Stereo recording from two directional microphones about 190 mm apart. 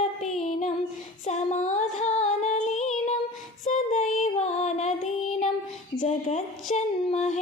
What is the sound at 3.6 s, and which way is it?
Child singing, 40° left (ahead or behind).